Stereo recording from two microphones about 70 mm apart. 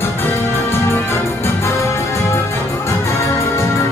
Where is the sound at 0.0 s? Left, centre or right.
Left.